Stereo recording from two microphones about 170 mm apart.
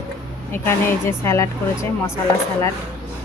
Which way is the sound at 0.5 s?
15° left (ahead or behind).